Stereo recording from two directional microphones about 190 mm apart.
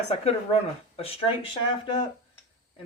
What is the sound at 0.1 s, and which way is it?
Speech, 30° left (ahead or behind).